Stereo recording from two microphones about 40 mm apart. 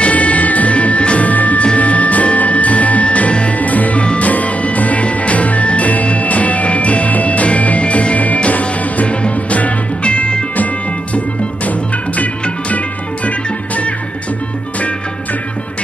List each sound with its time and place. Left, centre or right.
0.0 s music: left
4.0 s music: left
4.3 s music: left
12.2 s music: left